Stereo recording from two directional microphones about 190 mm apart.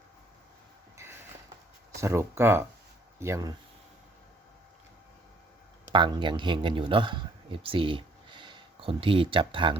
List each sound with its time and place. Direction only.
0.9 s a sound: 10° right (ahead or behind)
2.0 s speech: 15° right (ahead or behind)
5.9 s a man's voice: 25° right (ahead or behind)